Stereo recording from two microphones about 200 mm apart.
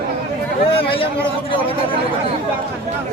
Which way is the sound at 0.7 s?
25° left (ahead or behind).